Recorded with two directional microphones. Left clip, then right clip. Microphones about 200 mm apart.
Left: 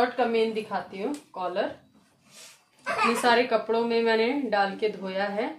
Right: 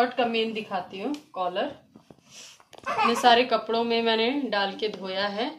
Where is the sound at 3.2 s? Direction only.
40° left (ahead or behind).